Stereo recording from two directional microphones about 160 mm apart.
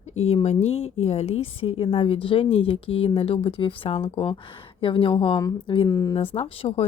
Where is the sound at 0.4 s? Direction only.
40° left (ahead or behind).